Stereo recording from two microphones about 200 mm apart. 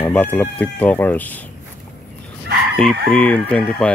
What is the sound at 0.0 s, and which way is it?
Speech, 10° left (ahead or behind).